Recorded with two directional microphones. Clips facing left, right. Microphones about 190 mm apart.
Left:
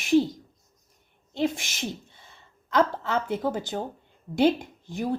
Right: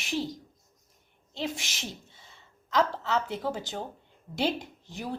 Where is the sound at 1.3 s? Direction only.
55° left (ahead or behind).